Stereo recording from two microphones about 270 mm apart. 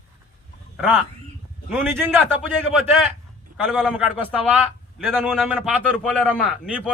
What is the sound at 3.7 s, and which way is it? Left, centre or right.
A man's voice, centre.